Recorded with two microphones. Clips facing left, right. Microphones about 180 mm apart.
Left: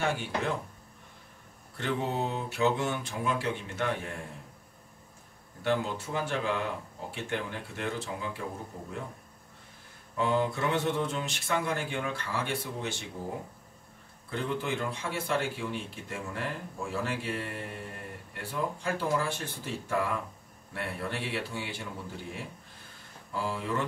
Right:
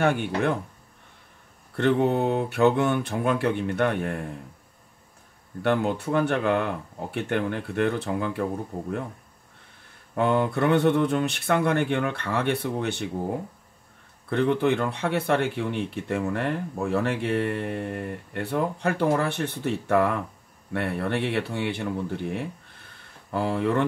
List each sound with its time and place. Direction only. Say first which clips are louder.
0.0 s speech: right 8 dB; 60° right (ahead or behind)
1.8 s speech: right 10 dB; 60° right (ahead or behind)
5.6 s speech: right 6 dB; 60° right (ahead or behind)
10.1 s speech: right 5 dB; 60° right (ahead or behind)
14.3 s speech: right 10 dB; 65° right (ahead or behind)